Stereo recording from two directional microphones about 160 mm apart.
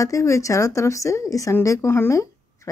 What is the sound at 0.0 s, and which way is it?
Speech, 20° left (ahead or behind).